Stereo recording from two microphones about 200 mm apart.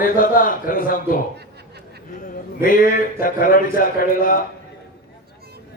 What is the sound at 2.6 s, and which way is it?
Speech, 45° left (ahead or behind).